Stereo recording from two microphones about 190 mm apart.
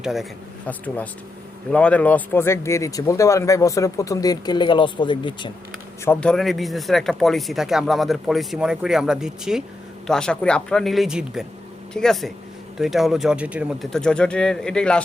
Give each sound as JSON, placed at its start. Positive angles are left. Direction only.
{"t": 0.0, "sound": "speech", "side_deg": 0}
{"t": 1.7, "sound": "speech", "side_deg": 5}
{"t": 6.1, "sound": "speech", "side_deg": 5}